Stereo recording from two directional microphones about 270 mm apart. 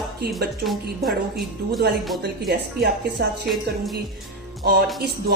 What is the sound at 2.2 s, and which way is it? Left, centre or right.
Speech, right.